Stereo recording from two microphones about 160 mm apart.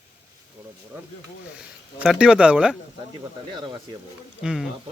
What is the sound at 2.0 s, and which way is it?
Speech, 5° right (ahead or behind).